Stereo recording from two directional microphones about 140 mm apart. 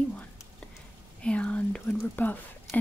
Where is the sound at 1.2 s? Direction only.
10° left (ahead or behind).